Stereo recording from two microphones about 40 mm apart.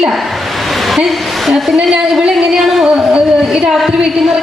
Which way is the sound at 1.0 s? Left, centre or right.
Centre.